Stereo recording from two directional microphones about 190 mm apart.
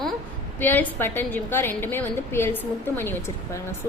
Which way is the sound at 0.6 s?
10° left (ahead or behind).